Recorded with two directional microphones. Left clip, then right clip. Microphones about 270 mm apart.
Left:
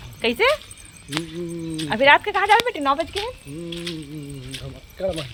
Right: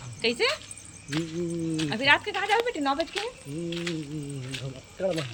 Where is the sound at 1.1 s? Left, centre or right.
Centre.